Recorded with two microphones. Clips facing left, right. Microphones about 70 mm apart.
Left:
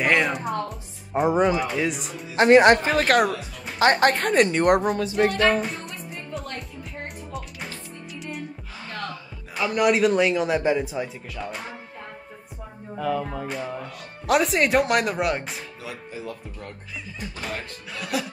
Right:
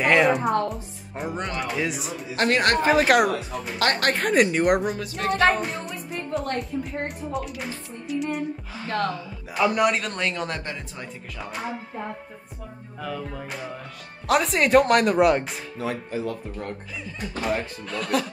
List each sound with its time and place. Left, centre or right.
0.0 s music: centre
0.7 s speech: centre
2.3 s speech: left
2.9 s a man's voice: centre
3.8 s speech: left
4.1 s a man's voice: centre
5.0 s speech: centre
5.5 s music: centre
6.1 s music: right
7.3 s music: centre
9.6 s a man's voice: centre
11.3 s a man's voice: centre
12.9 s a man's voice: centre
17.9 s a man's voice: centre